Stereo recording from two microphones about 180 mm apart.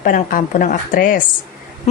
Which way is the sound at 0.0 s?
50° left (ahead or behind).